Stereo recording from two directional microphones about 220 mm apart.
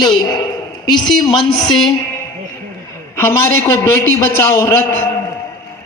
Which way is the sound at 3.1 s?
10° left (ahead or behind).